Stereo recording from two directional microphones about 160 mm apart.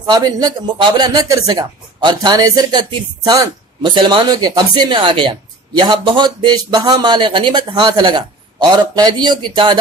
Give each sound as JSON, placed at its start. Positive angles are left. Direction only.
{"t": 0.0, "sound": "speech", "side_deg": -25}